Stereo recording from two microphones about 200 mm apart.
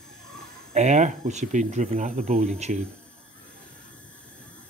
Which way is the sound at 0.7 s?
35° right (ahead or behind).